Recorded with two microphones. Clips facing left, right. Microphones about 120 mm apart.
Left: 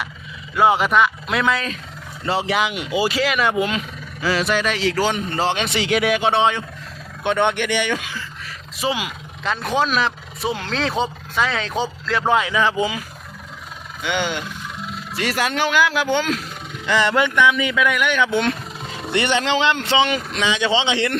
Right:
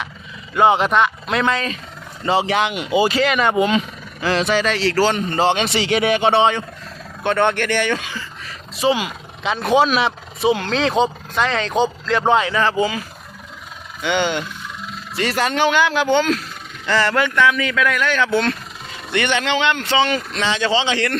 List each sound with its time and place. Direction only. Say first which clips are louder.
0.5 s speech: right 1 dB; 5° left (ahead or behind)
7.3 s speech: right 1 dB; 15° left (ahead or behind)
14.0 s speech: right 4 dB; 5° left (ahead or behind)
19.1 s speech: even; 30° left (ahead or behind)
20.1 s speech: right 1 dB; 15° left (ahead or behind)